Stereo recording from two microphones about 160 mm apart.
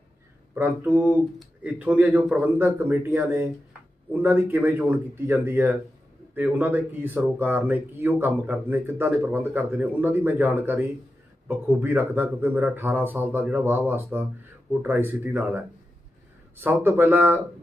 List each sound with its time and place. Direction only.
0.5 s speech: 10° right (ahead or behind)